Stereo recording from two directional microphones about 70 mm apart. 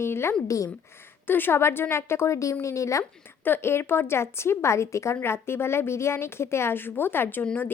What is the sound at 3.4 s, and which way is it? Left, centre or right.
A woman's voice, left.